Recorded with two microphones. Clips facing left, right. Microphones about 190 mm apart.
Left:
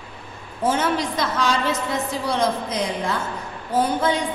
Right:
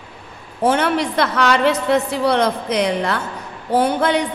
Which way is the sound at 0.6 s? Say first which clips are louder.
Right 4 dB; 65° right (ahead or behind).